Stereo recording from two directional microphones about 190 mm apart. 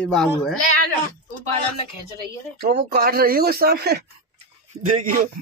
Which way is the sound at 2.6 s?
55° right (ahead or behind).